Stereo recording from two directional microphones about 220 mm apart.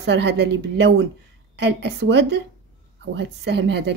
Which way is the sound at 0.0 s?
50° right (ahead or behind).